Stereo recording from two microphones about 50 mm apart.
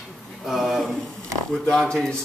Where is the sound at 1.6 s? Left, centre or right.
Centre.